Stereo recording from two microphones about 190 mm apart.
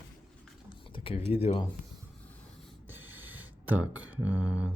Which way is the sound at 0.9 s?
30° left (ahead or behind).